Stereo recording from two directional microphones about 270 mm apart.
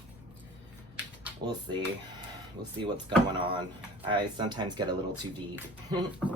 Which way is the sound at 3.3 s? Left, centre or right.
Centre.